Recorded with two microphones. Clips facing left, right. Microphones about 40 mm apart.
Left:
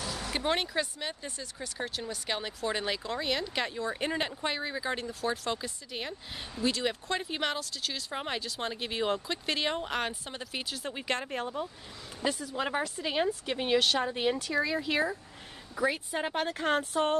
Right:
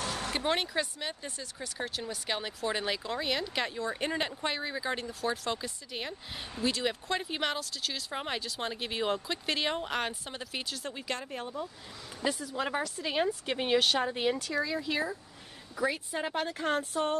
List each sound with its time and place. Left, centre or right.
0.0 s a sound: right
0.4 s speech: centre
11.3 s speech: left
12.2 s speech: centre
13.5 s speech: centre
14.6 s speech: left
15.9 s speech: left